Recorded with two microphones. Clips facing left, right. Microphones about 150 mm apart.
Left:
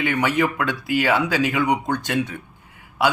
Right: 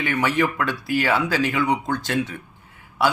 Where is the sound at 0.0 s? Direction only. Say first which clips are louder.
Left 1 dB; 20° left (ahead or behind).